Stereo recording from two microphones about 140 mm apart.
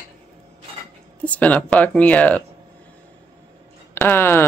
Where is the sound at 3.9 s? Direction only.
15° left (ahead or behind).